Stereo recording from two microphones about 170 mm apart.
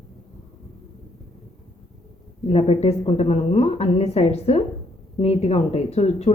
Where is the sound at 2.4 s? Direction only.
35° left (ahead or behind).